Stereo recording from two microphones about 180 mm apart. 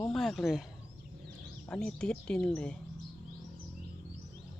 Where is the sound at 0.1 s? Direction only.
Centre (ahead or behind).